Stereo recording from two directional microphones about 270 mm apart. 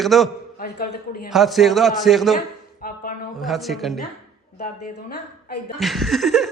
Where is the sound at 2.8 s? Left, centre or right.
Left.